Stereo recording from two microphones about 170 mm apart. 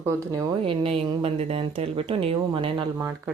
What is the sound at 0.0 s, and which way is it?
Speech, 20° right (ahead or behind).